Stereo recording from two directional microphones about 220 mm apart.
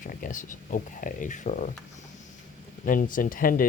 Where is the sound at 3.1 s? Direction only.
40° left (ahead or behind).